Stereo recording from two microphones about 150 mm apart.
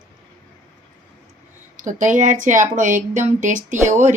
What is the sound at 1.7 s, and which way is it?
Speech, 60° right (ahead or behind).